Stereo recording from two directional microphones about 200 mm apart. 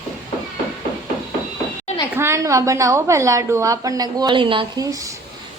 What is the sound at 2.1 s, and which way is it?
A woman's voice, 15° right (ahead or behind).